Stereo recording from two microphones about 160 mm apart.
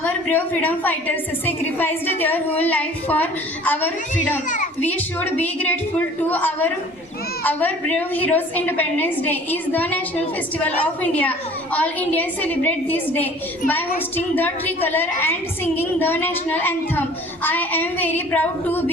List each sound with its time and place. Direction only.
0.0 s a woman's voice: 10° left (ahead or behind)
4.4 s a child's voice: 55° left (ahead or behind)
4.8 s a woman's voice: 10° left (ahead or behind)